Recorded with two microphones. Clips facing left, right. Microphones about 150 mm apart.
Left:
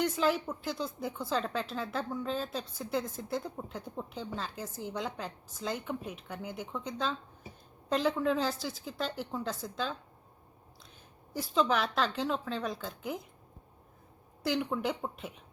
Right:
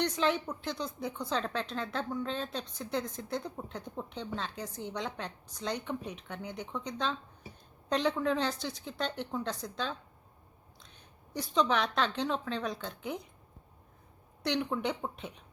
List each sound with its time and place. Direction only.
0.0 s a woman's voice: 5° left (ahead or behind)
11.3 s a woman's voice: 5° left (ahead or behind)
14.4 s a woman's voice: 5° left (ahead or behind)